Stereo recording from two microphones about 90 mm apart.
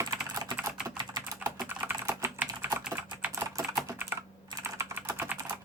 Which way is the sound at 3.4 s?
35° right (ahead or behind).